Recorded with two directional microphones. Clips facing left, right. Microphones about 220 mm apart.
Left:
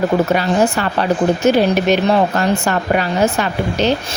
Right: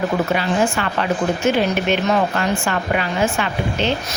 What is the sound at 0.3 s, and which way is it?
A woman's voice, 40° left (ahead or behind).